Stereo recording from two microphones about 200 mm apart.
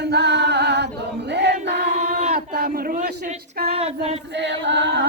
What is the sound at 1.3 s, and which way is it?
Music, 60° right (ahead or behind).